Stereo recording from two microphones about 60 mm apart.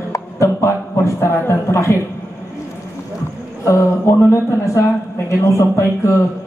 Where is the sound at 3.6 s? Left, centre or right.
Left.